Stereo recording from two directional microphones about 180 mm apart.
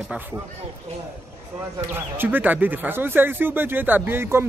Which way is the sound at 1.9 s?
10° right (ahead or behind).